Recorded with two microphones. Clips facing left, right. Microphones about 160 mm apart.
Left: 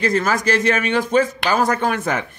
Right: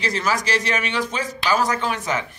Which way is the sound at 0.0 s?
50° left (ahead or behind).